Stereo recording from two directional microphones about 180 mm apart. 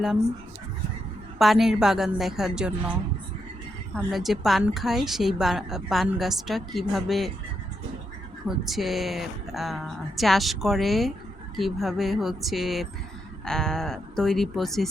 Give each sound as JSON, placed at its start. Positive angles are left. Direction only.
{"t": 1.4, "sound": "a woman's voice", "side_deg": 0}
{"t": 3.9, "sound": "a woman's voice", "side_deg": 0}
{"t": 8.4, "sound": "a woman's voice", "side_deg": 0}